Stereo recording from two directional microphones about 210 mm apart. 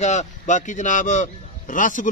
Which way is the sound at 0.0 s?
35° left (ahead or behind).